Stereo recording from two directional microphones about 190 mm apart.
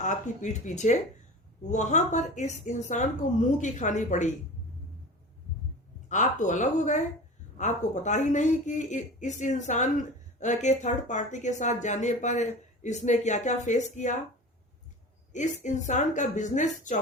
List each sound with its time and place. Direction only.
0.0 s speech: 40° left (ahead or behind)
6.1 s speech: 40° left (ahead or behind)
15.3 s speech: 40° left (ahead or behind)